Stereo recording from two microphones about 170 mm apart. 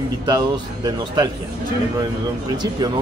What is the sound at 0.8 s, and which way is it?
Speech, 25° right (ahead or behind).